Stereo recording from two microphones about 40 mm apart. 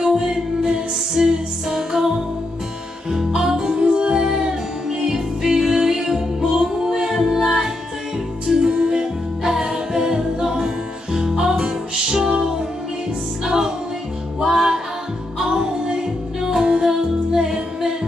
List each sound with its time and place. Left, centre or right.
0.0 s music: centre